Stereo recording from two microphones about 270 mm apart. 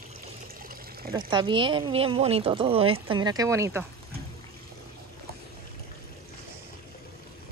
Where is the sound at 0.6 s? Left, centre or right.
Right.